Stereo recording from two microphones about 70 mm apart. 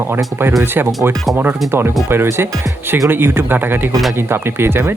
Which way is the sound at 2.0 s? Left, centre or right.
Right.